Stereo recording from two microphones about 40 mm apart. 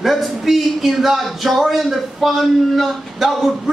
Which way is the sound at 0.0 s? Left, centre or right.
Centre.